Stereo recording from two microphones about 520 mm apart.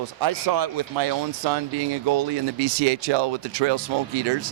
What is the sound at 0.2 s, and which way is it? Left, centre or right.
Speech, right.